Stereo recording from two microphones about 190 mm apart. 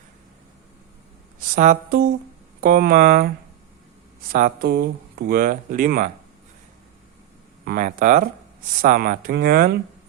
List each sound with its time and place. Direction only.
1.5 s speech: 45° right (ahead or behind)
7.6 s speech: 50° right (ahead or behind)